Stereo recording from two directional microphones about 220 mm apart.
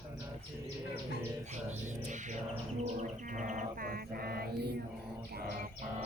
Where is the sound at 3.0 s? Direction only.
35° right (ahead or behind).